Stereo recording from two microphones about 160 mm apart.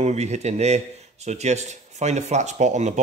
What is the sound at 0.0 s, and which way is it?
Speech, 45° right (ahead or behind).